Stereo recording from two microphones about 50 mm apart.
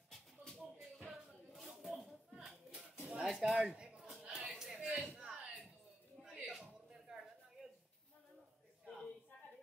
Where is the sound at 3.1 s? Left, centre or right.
Centre.